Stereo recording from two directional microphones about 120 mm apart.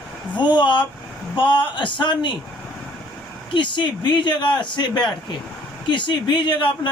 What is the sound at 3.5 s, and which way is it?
Speech, 40° left (ahead or behind).